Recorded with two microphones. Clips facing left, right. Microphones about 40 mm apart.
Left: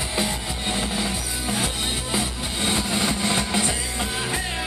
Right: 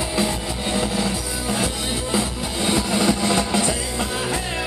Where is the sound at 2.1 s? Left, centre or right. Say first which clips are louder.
Right 4 dB; centre.